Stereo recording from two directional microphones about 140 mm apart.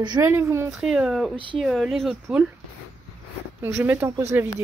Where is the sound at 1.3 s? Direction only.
35° right (ahead or behind).